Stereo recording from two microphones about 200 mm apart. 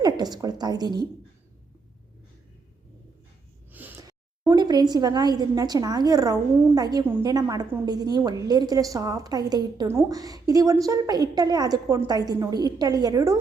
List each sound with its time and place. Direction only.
0.0 s a woman's voice: 20° right (ahead or behind)
3.7 s a woman's voice: 10° right (ahead or behind)